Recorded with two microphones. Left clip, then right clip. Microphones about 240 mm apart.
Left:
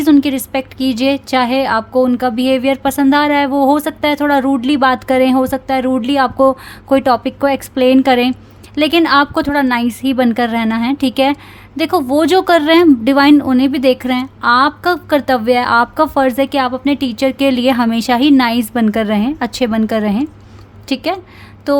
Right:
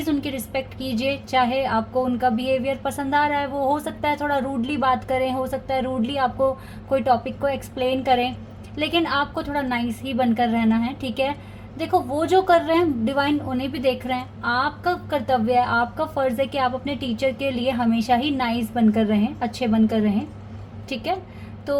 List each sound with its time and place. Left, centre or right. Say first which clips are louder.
0.0 s speech: left 13 dB; left
4.9 s a woman's voice: left 11 dB; left
5.5 s a woman's voice: left 9 dB; left